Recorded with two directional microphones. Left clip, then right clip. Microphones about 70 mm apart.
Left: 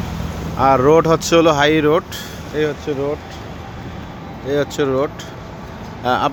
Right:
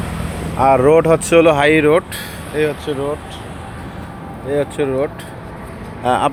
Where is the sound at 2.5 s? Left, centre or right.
Left.